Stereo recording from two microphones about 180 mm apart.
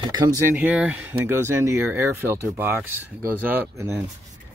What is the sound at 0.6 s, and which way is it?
Speech, 5° right (ahead or behind).